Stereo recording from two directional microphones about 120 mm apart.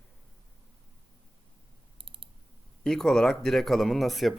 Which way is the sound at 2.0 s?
50° right (ahead or behind).